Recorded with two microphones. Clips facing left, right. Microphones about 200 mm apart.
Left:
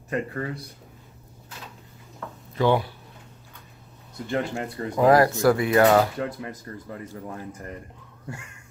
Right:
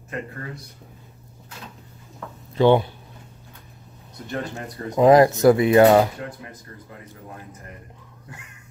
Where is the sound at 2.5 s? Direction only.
25° right (ahead or behind).